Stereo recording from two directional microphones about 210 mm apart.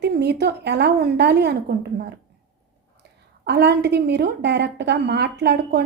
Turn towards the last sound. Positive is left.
turn(degrees=-50)  # may be behind; listen again after turning